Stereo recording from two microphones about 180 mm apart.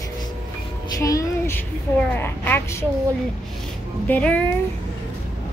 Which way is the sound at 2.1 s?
10° left (ahead or behind).